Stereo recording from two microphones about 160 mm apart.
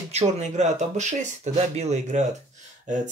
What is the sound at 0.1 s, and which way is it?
Speech, 45° right (ahead or behind).